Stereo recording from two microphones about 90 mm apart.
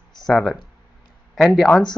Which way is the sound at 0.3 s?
Centre (ahead or behind).